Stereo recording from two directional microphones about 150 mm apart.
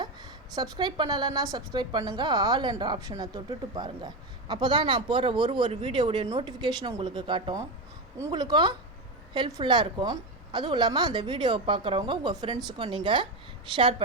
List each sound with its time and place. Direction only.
0.0 s a woman's voice: 25° right (ahead or behind)